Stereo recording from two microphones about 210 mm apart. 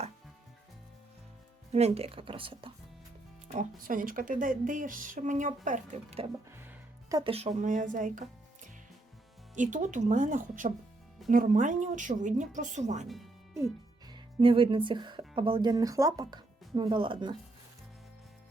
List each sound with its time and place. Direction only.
1.7 s speech: 30° right (ahead or behind)
3.5 s speech: 40° right (ahead or behind)
6.6 s speech: 15° right (ahead or behind); by 8.2 s 40° right (ahead or behind)
9.6 s speech: 35° right (ahead or behind)
14.1 s speech: 25° right (ahead or behind)